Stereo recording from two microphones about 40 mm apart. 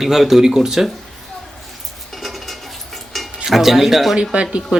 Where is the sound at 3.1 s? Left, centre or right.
Centre.